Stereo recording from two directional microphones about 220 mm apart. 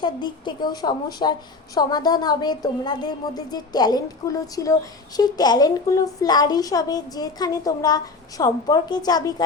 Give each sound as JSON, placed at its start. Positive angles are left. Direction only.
{"t": 0.0, "sound": "a woman's voice", "side_deg": 20}